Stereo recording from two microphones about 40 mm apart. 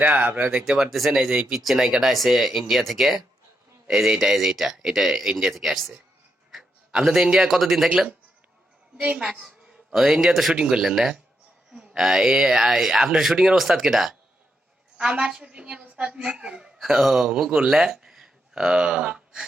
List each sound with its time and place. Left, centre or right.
0.1 s speech: right
0.9 s speech: centre
1.1 s speech: centre
1.5 s a man's voice: centre
6.5 s a sound: centre
7.4 s speech: centre
9.9 s speech: centre
10.5 s a woman's voice: centre
10.8 s speech: centre
15.1 s a woman's voice: right
16.7 s speech: centre
18.5 s speech: right